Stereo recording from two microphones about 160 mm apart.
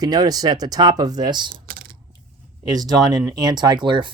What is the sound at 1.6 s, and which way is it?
Mechanisms, 65° right (ahead or behind).